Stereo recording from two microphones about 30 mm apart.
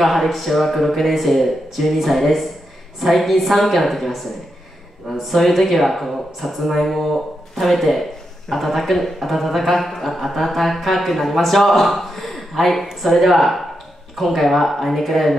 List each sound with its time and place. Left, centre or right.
0.0 s speech: centre
5.3 s speech: centre